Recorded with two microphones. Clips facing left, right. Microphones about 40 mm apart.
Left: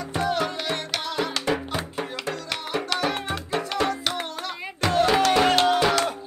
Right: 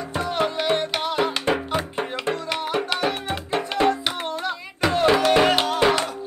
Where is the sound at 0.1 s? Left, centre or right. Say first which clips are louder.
Right 1 dB; right.